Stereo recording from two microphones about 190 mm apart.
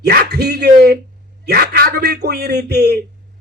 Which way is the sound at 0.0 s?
55° right (ahead or behind).